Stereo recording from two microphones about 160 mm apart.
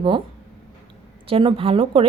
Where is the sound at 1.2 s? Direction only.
35° right (ahead or behind).